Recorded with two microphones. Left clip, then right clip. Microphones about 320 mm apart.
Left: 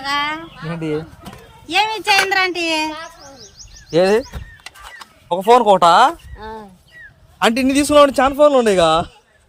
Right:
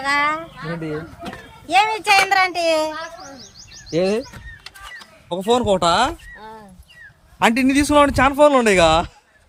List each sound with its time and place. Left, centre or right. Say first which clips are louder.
0.0 s speech: right 2 dB; centre
0.6 s speech: left 4 dB; centre
1.6 s speech: even; centre
3.9 s speech: left 6 dB; centre
5.3 s a man's voice: left 7 dB; centre
6.4 s a sound: left 6 dB; right
7.3 s a man's voice: left 1 dB; centre